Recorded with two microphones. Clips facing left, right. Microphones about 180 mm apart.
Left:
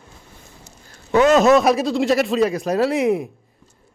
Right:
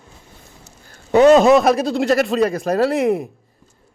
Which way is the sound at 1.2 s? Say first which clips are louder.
Right 4 dB; 35° right (ahead or behind).